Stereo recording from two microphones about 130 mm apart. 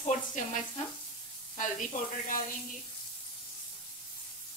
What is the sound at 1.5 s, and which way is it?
Speech, 80° left.